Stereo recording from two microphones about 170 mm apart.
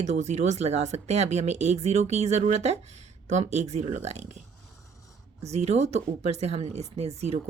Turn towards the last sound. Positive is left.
turn(degrees=-40)  # may be behind; listen again after turning